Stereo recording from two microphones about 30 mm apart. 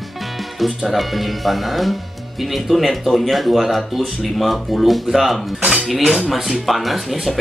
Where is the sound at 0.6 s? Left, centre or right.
Centre.